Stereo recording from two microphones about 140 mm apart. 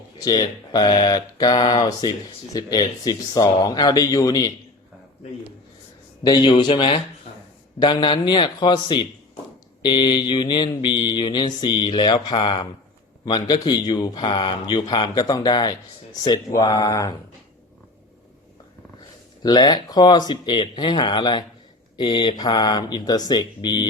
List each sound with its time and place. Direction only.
0.2 s speech: 30° left (ahead or behind)
6.2 s speech: 25° left (ahead or behind)
6.5 s mantra: 35° left (ahead or behind)
16.6 s speech: 25° left (ahead or behind)
19.4 s mantra: 30° left (ahead or behind)